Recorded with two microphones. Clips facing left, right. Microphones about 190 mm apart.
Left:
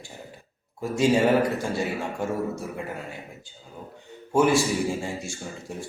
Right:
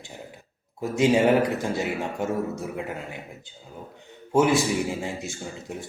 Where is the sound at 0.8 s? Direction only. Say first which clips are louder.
Right 1 dB; 20° right (ahead or behind).